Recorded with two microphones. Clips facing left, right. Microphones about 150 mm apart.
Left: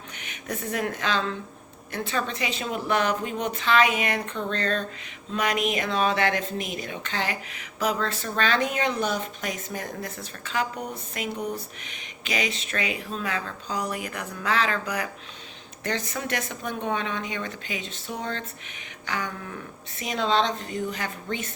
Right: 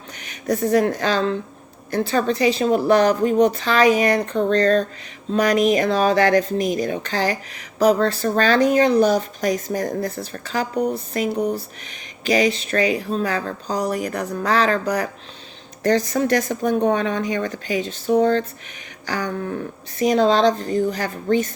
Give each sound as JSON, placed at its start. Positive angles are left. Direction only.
{"t": 0.3, "sound": "speech", "side_deg": -40}